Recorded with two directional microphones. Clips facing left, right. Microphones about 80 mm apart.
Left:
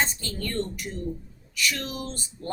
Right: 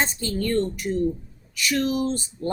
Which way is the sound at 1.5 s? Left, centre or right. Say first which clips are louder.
Right 7 dB; right.